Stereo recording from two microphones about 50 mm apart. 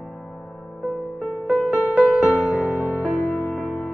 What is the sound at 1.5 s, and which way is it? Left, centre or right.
Music, right.